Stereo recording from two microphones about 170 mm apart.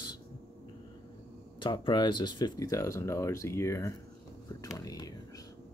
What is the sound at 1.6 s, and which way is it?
Speech, 25° left (ahead or behind).